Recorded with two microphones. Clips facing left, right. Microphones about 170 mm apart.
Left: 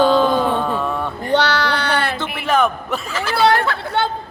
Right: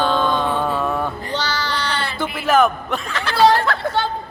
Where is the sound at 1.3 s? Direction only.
60° left (ahead or behind).